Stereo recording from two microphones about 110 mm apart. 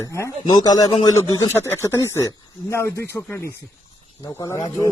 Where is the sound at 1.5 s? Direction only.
20° left (ahead or behind).